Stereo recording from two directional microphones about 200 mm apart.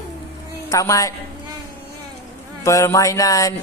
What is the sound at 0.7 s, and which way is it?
Speech, 15° left (ahead or behind).